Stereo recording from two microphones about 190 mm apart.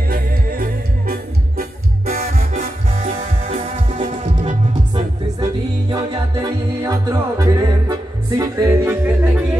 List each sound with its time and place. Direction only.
0.1 s music: 50° right (ahead or behind)
4.9 s music: 20° right (ahead or behind)